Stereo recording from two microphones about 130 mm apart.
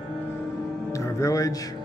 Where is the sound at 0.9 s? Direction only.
20° left (ahead or behind).